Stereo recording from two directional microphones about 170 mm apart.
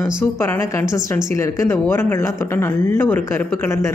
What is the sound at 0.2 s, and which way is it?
Speech, 15° left (ahead or behind).